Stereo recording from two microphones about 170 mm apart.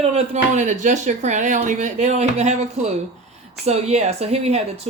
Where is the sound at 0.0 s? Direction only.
40° right (ahead or behind).